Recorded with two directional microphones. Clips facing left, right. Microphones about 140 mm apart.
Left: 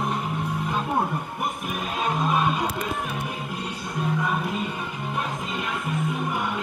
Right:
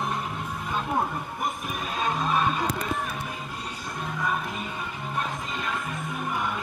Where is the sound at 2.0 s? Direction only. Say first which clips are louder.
Left 2 dB; 10° left (ahead or behind).